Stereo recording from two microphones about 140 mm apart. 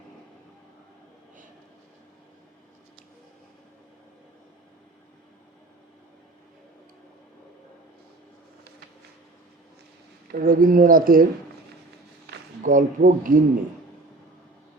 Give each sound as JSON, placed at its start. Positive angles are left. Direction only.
{"t": 10.3, "sound": "speech", "side_deg": -90}
{"t": 12.6, "sound": "speech", "side_deg": -75}